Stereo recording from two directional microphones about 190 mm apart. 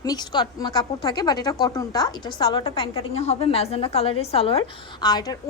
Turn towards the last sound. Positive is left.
turn(degrees=20)  # may be behind; listen again after turning